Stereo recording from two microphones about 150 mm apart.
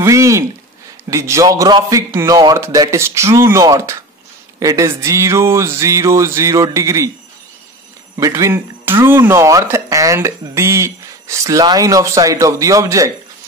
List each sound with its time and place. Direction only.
0.0 s a sound: 20° right (ahead or behind)
1.1 s speech: 20° right (ahead or behind)
8.2 s speech: 20° right (ahead or behind)